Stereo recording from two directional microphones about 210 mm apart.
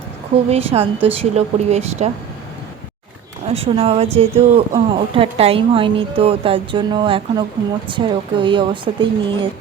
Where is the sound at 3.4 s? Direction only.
30° right (ahead or behind).